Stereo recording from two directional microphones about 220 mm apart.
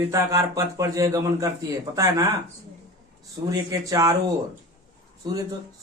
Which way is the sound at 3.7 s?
15° right (ahead or behind).